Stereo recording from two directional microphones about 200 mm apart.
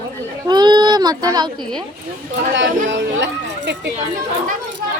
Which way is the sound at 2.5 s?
65° right (ahead or behind).